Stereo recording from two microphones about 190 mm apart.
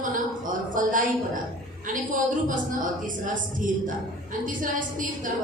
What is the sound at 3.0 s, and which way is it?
A woman's voice, 45° right (ahead or behind).